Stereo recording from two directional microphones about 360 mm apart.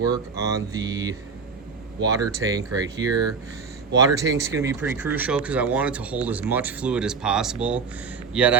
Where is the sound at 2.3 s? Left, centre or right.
Centre.